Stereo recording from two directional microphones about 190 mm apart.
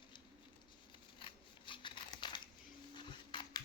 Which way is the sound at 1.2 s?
25° left (ahead or behind).